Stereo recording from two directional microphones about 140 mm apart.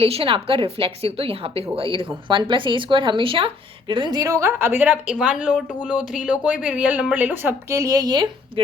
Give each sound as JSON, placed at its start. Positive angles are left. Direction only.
{"t": 0.0, "sound": "a woman's voice", "side_deg": -45}